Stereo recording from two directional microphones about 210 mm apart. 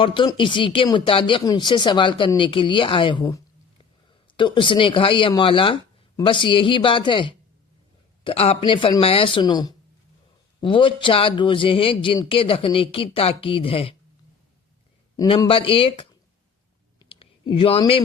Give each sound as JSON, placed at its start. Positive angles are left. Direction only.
{"t": 0.0, "sound": "speech", "side_deg": 25}
{"t": 15.1, "sound": "speech", "side_deg": 15}
{"t": 17.0, "sound": "a sound", "side_deg": 25}